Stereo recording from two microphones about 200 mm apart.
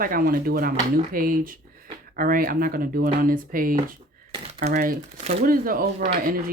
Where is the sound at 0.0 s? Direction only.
45° right (ahead or behind).